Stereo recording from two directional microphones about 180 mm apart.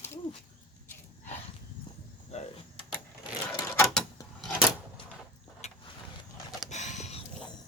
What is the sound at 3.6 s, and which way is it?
Mechanisms, 15° left (ahead or behind).